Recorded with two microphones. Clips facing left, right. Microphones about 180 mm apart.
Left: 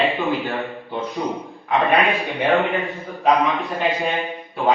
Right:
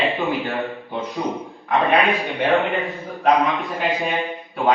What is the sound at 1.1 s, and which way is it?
Speech, centre (ahead or behind).